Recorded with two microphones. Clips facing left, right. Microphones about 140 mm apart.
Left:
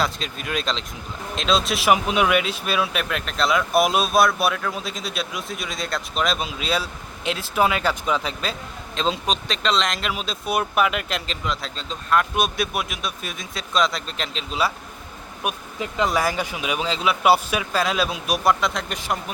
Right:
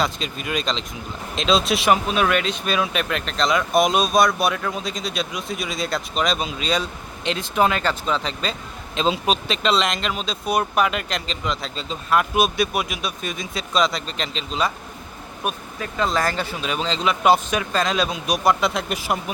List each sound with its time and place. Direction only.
0.0 s speech: centre (ahead or behind)
2.0 s speech: 15° left (ahead or behind)
15.4 s speech: 15° left (ahead or behind); by 19.2 s 5° right (ahead or behind)